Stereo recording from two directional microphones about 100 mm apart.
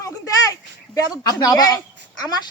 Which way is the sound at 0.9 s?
40° left (ahead or behind).